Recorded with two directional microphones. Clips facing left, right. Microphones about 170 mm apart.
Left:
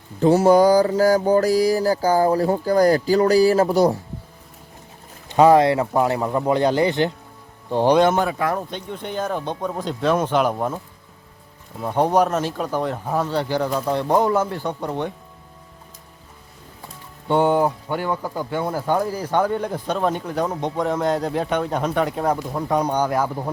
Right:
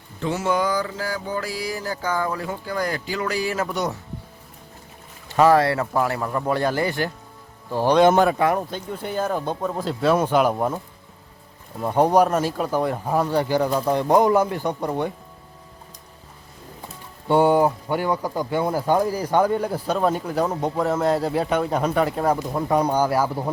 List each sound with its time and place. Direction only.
0.2 s a sound: 40° left (ahead or behind)
5.3 s speech: 20° left (ahead or behind)
8.5 s speech: 5° right (ahead or behind)
11.8 s speech: 10° right (ahead or behind)
17.2 s speech: 10° right (ahead or behind)